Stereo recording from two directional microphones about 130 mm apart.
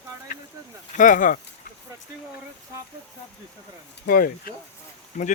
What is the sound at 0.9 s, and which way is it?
Speech, 85° left.